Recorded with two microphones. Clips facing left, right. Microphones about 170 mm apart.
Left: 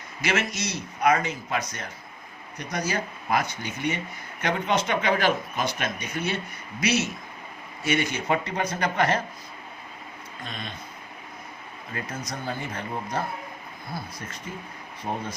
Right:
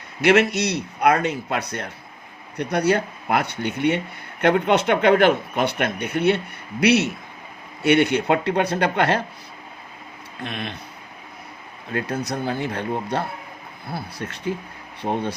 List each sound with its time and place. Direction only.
0.2 s speech: 65° right (ahead or behind)
10.4 s speech: 70° right (ahead or behind)
11.9 s speech: 70° right (ahead or behind)